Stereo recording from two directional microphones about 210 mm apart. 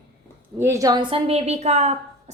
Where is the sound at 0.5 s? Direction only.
15° right (ahead or behind); by 1.9 s 30° right (ahead or behind).